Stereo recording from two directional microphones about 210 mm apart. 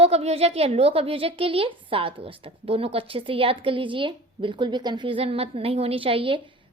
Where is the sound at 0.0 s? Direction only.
30° right (ahead or behind).